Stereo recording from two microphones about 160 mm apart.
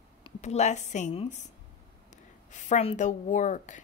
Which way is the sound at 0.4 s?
45° left (ahead or behind).